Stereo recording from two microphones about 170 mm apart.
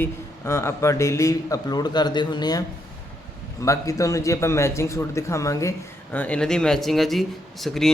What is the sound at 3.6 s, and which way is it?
A man's voice, 20° left (ahead or behind).